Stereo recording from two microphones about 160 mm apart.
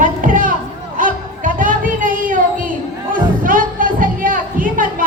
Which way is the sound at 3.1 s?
60° right (ahead or behind).